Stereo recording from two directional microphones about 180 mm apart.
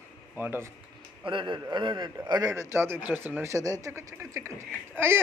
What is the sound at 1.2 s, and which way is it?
A man's voice, 30° right (ahead or behind).